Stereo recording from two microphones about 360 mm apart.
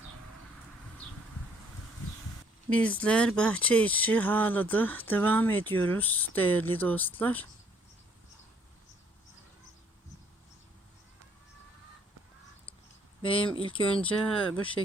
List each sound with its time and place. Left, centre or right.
2.6 s speech: centre
13.2 s speech: centre
14.0 s speech: centre
14.6 s speech: centre